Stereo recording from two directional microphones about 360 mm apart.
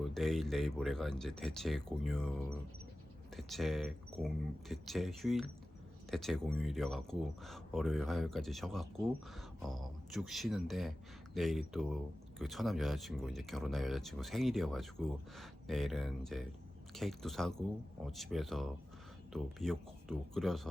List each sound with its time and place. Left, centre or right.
0.0 s speech: centre